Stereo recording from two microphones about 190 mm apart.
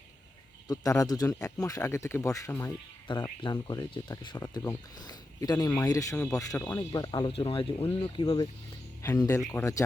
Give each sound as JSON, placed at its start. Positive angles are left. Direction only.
{"t": 0.7, "sound": "speech", "side_deg": 20}